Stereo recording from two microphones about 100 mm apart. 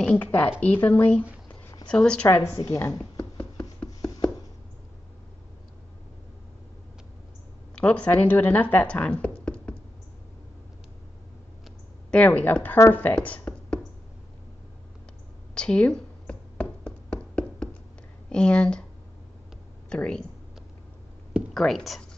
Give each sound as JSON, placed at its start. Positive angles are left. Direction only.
{"t": 0.0, "sound": "speech", "side_deg": 15}
{"t": 2.2, "sound": "a woman's voice", "side_deg": 25}
{"t": 2.6, "sound": "a woman's voice", "side_deg": 35}
{"t": 3.2, "sound": "a sound", "side_deg": 10}
{"t": 7.7, "sound": "speech", "side_deg": 10}
{"t": 12.1, "sound": "speech", "side_deg": 15}
{"t": 15.5, "sound": "a sound", "side_deg": 10}
{"t": 18.3, "sound": "speech", "side_deg": 10}
{"t": 19.9, "sound": "speech", "side_deg": 10}
{"t": 21.5, "sound": "speech", "side_deg": 5}